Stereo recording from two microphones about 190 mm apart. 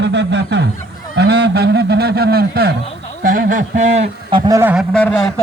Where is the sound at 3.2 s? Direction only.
45° right (ahead or behind).